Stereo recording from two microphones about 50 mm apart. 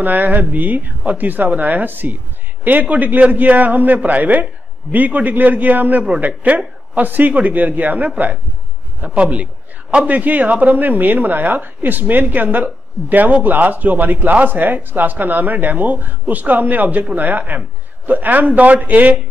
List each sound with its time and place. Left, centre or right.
0.0 s a man's voice: right